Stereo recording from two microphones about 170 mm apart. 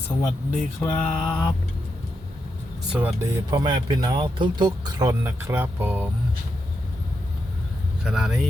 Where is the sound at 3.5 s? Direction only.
25° right (ahead or behind).